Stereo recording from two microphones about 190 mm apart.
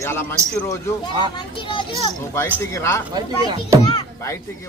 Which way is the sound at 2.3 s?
15° left (ahead or behind).